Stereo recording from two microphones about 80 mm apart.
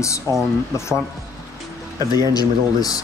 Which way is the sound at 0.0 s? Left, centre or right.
Left.